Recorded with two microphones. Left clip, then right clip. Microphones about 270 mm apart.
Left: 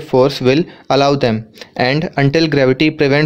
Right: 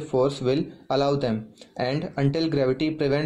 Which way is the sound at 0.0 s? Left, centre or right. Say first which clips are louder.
Left 11 dB; left.